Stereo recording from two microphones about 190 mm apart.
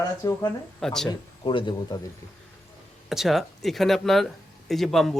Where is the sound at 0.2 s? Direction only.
20° left (ahead or behind).